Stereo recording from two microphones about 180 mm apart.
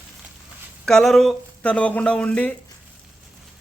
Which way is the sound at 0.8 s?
Centre (ahead or behind).